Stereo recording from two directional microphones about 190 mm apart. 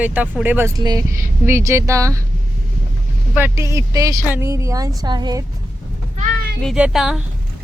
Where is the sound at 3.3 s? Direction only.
10° right (ahead or behind).